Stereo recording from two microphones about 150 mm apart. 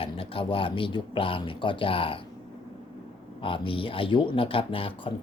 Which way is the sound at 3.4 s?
35° left (ahead or behind).